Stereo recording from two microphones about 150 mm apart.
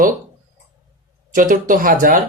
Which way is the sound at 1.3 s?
60° right (ahead or behind).